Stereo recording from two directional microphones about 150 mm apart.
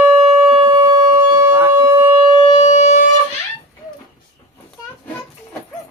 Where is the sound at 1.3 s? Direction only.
15° right (ahead or behind).